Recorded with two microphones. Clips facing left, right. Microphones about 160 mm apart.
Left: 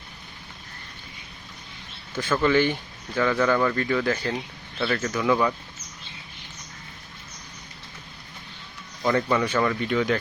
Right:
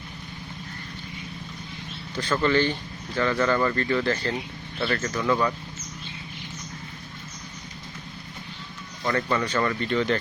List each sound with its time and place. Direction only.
2.1 s speech: 5° left (ahead or behind)
9.0 s speech: 10° left (ahead or behind)